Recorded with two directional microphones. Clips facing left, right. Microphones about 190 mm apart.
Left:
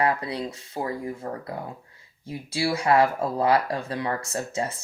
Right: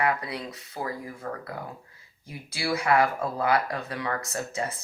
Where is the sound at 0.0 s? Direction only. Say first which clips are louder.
Left 3 dB; 30° left (ahead or behind).